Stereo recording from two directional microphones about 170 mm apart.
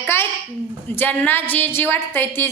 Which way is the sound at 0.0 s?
15° left (ahead or behind).